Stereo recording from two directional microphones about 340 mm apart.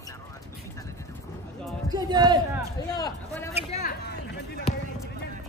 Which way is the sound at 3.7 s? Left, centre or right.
Left.